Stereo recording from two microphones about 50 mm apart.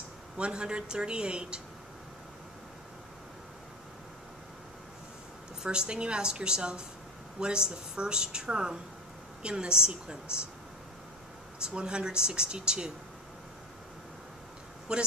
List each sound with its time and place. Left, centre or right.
0.4 s speech: centre
5.6 s speech: centre
11.6 s speech: centre
14.9 s speech: centre